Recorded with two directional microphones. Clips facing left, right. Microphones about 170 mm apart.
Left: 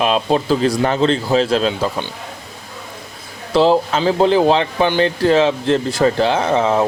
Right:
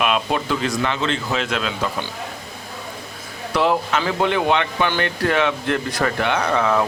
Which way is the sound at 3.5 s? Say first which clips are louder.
Left 6 dB; 30° left (ahead or behind).